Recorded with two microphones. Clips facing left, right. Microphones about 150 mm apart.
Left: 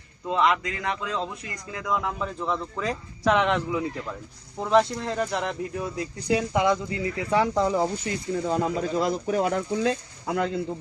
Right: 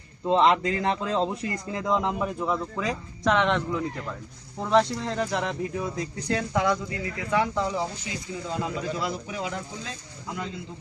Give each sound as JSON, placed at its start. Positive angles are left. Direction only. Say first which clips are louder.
{"t": 0.3, "sound": "a man's voice", "louder": "right 3 dB", "side_deg": -30}
{"t": 6.2, "sound": "speech", "louder": "left 3 dB", "side_deg": 15}
{"t": 7.3, "sound": "speech", "louder": "left 3 dB", "side_deg": 35}